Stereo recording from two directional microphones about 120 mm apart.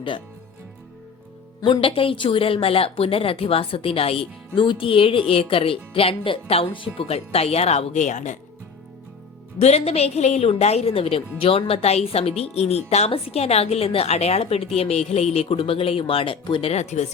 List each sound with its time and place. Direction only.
1.6 s a woman's voice: 45° left (ahead or behind); by 8.4 s 90° left
9.6 s a woman's voice: 65° left (ahead or behind)